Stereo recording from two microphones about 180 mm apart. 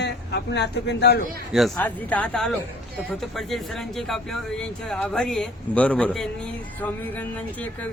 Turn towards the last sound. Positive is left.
turn(degrees=5)  # may be behind; listen again after turning